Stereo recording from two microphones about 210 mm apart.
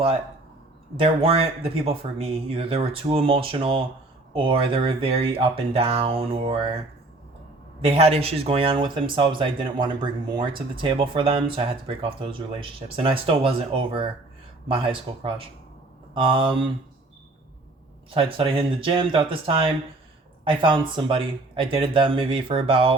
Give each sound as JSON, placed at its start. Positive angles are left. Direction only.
{"t": 0.9, "sound": "speech", "side_deg": -25}
{"t": 7.8, "sound": "speech", "side_deg": -30}
{"t": 18.1, "sound": "speech", "side_deg": -25}